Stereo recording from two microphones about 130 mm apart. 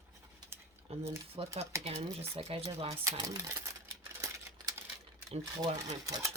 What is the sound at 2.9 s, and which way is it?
Typewriter, 25° right (ahead or behind).